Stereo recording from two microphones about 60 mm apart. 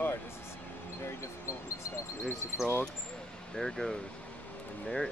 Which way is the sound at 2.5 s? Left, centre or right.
Left.